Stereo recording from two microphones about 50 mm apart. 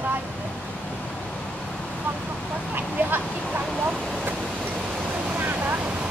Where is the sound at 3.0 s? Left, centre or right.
Right.